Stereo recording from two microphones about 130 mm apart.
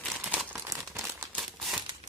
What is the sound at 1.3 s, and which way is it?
Crumpling, centre (ahead or behind).